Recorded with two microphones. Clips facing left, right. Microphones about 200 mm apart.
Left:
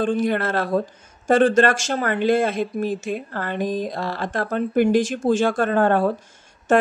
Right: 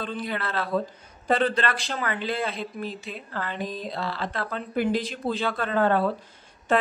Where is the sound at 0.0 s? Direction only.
45° left (ahead or behind).